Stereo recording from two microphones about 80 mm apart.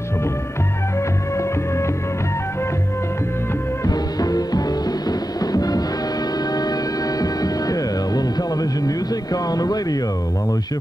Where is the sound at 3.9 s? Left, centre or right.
Left.